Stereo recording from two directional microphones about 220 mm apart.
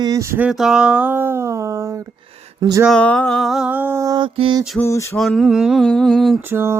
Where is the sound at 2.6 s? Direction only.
15° right (ahead or behind).